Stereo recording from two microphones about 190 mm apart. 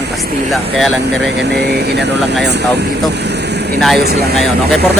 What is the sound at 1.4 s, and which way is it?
Speech, 60° right (ahead or behind).